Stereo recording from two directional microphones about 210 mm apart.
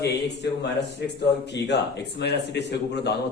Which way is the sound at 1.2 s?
55° left (ahead or behind).